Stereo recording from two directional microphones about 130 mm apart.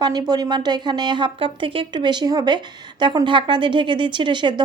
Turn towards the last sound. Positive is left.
turn(degrees=-35)  # may be behind; listen again after turning